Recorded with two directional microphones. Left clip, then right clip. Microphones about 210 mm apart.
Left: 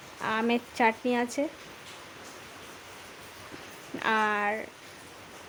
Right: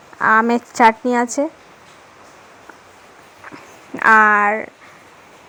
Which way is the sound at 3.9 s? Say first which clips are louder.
Right 16 dB; 25° right (ahead or behind).